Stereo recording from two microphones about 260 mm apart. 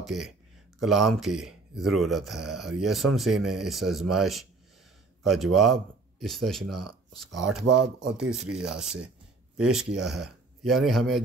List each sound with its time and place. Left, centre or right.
0.0 s a man's voice: centre
6.6 s speech: right
7.6 s speech: right
8.2 s speech: centre